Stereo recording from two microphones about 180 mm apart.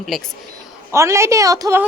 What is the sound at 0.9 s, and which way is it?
Speech, 15° right (ahead or behind).